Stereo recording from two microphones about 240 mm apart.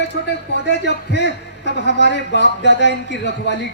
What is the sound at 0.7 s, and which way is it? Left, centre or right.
A man's voice, left.